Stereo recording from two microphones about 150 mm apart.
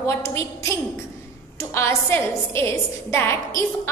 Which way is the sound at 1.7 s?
15° left (ahead or behind).